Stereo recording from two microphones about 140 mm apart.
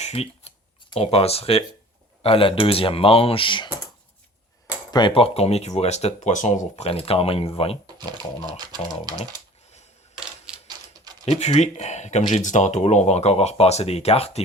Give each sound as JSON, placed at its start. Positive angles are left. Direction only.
{"t": 0.0, "sound": "a sound", "side_deg": 45}
{"t": 0.9, "sound": "speech", "side_deg": 45}
{"t": 4.9, "sound": "speech", "side_deg": 35}
{"t": 8.4, "sound": "speech", "side_deg": -30}
{"t": 10.2, "sound": "coin", "side_deg": -5}
{"t": 10.7, "sound": "a sound", "side_deg": -30}
{"t": 11.3, "sound": "speech", "side_deg": 50}